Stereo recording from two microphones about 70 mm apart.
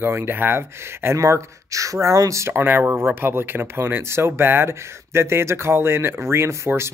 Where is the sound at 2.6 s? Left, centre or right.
Right.